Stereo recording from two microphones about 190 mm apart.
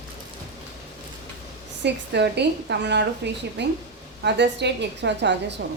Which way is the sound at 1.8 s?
65° right (ahead or behind).